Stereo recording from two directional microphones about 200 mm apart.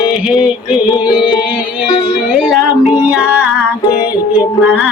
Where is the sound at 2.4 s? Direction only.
5° right (ahead or behind).